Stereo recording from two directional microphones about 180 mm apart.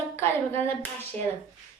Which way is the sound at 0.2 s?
15° left (ahead or behind).